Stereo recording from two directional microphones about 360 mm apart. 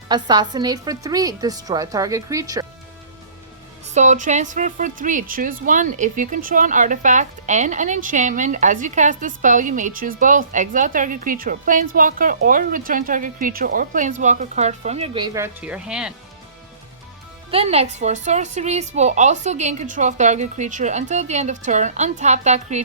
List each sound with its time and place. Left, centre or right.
0.1 s a woman's voice: centre
3.9 s a woman's voice: centre
17.5 s a woman's voice: centre